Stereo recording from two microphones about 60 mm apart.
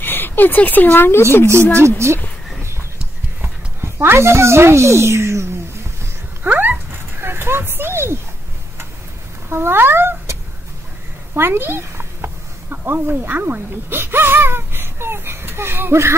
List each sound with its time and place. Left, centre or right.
0.0 s a sound: left
0.8 s speech: left
1.8 s a child's voice: right
3.8 s a child's voice: right
6.4 s dog: right
6.9 s a sound: right
9.5 s speech: right
11.3 s cat: right
12.8 s speech: right